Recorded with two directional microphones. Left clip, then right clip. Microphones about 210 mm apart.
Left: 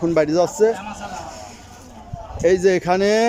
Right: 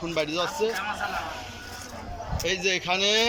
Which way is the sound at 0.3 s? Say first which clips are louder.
Left 10 dB; 30° left (ahead or behind).